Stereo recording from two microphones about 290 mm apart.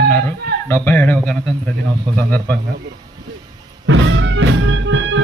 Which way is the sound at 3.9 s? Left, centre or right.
Right.